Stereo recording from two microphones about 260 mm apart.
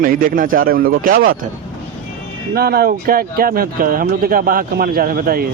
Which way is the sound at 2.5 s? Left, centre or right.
Right.